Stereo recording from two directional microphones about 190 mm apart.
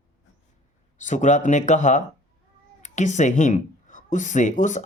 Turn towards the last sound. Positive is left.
turn(degrees=40)  # may be behind; listen again after turning